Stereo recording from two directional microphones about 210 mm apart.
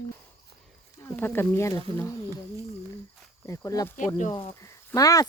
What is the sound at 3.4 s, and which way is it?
Speech, 15° left (ahead or behind).